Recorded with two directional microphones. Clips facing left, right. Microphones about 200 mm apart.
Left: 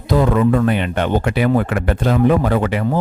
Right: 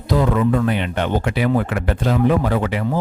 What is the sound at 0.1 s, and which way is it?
Speech, 50° left (ahead or behind).